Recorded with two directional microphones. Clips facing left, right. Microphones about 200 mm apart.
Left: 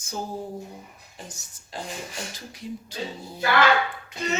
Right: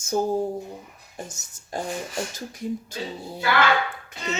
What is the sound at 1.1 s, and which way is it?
Speech, 50° right (ahead or behind).